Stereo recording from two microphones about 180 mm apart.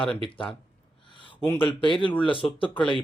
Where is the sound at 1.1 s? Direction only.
25° left (ahead or behind).